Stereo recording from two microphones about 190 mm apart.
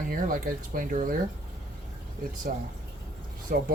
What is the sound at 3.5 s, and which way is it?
Speech, 50° right (ahead or behind).